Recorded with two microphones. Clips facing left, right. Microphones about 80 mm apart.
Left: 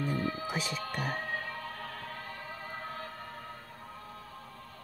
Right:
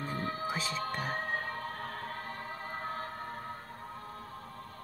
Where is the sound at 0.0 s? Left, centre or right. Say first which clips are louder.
Left 2 dB; right.